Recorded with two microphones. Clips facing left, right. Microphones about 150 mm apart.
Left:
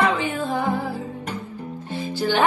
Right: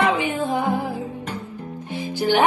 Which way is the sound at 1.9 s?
15° right (ahead or behind).